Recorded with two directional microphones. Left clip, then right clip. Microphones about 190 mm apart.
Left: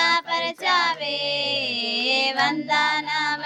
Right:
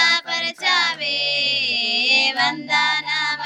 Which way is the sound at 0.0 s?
25° left (ahead or behind).